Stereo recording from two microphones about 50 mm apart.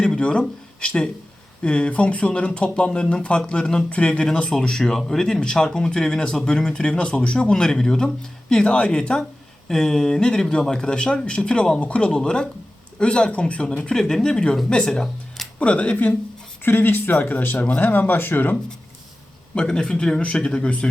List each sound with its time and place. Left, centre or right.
0.0 s a sound: centre
1.6 s speech: left
3.8 s speech: left
15.5 s speech: left
16.6 s speech: left
18.0 s speech: left
19.5 s speech: centre